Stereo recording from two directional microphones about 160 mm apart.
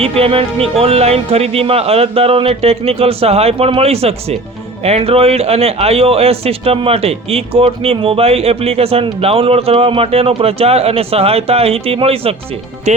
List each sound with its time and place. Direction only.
0.0 s speech: 35° right (ahead or behind)